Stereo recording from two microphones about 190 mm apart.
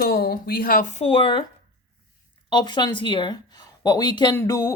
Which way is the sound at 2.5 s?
25° left (ahead or behind).